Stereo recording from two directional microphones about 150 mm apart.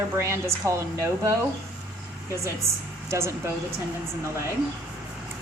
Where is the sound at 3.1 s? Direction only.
20° right (ahead or behind).